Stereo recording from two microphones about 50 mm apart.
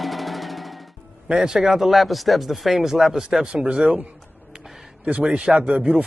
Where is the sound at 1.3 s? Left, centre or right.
Centre.